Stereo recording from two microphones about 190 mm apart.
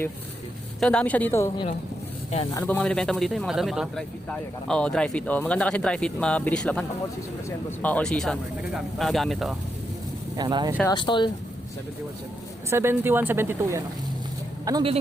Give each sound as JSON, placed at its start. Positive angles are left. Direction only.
{"t": 0.8, "sound": "a woman's voice", "side_deg": 5}
{"t": 10.3, "sound": "speech", "side_deg": -20}
{"t": 10.9, "sound": "speech", "side_deg": 25}
{"t": 12.7, "sound": "speech", "side_deg": -10}